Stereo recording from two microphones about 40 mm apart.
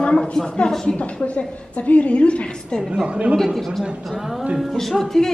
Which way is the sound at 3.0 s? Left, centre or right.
Right.